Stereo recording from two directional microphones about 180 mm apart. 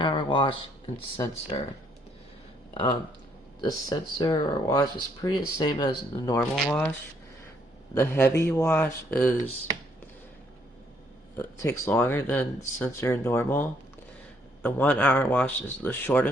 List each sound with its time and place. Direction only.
0.0 s a sound: 25° left (ahead or behind)
1.5 s speech: 25° left (ahead or behind)
3.6 s speech: 20° left (ahead or behind)
6.3 s speech: 10° left (ahead or behind)
7.9 s speech: 10° left (ahead or behind)
11.3 s speech: 15° left (ahead or behind)